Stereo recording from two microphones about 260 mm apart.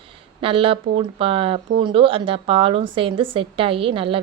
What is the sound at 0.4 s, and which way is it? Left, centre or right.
A woman's voice, right.